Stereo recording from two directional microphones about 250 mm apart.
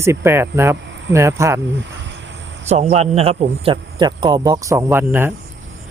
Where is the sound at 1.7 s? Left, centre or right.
Right.